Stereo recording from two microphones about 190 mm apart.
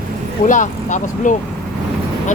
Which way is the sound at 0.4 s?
40° left (ahead or behind).